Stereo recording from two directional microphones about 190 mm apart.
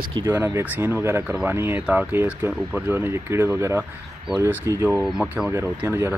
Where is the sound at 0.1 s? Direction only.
15° right (ahead or behind).